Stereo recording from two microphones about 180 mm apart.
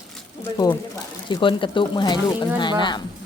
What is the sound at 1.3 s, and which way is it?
Speech, 25° left (ahead or behind).